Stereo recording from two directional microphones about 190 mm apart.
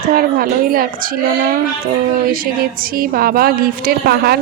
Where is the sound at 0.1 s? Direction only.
50° right (ahead or behind).